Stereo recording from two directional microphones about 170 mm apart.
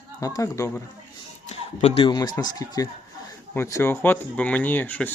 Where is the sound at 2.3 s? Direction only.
20° left (ahead or behind).